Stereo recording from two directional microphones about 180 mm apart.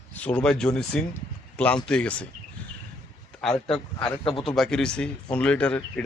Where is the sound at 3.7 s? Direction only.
30° left (ahead or behind).